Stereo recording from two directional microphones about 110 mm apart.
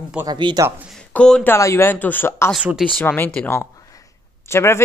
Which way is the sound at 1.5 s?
25° left (ahead or behind).